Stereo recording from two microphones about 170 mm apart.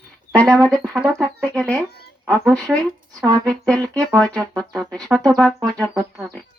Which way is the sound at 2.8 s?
20° right (ahead or behind).